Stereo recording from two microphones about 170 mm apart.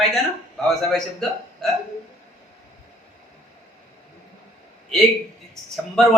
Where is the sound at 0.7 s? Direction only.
Centre (ahead or behind).